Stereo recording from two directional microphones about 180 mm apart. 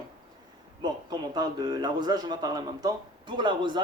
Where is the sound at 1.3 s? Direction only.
25° right (ahead or behind).